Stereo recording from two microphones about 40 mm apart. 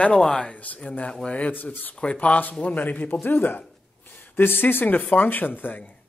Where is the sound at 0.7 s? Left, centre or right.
Left.